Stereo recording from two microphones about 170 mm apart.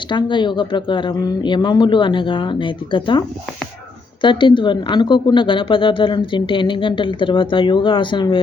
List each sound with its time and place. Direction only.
0.1 s speech: 30° left (ahead or behind)